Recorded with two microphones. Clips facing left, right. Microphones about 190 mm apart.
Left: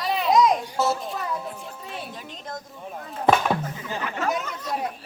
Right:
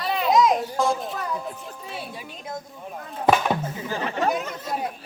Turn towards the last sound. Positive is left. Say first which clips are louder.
# even
turn(degrees=0)  # may be behind; listen again after turning